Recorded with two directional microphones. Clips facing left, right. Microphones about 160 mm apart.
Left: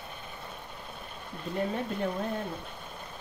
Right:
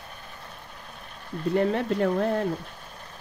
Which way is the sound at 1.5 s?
75° right (ahead or behind).